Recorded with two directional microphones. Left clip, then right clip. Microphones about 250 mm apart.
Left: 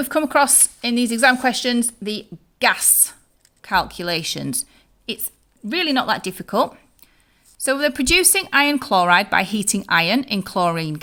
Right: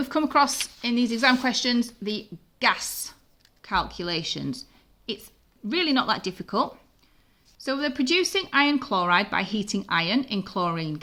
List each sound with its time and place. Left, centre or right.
0.0 s a woman's voice: left